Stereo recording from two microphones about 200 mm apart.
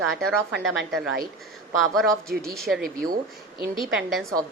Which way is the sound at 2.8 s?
45° right (ahead or behind).